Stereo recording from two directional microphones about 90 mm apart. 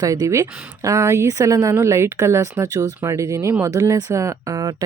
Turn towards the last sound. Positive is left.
turn(degrees=-40)  # may be behind; listen again after turning